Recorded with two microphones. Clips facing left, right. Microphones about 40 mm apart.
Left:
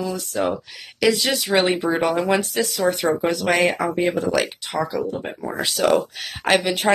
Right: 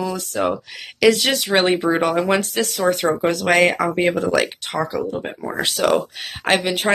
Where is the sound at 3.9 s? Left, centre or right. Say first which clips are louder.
Right 2 dB; right.